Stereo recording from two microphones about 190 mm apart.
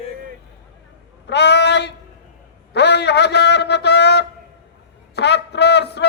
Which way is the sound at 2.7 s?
60° left (ahead or behind).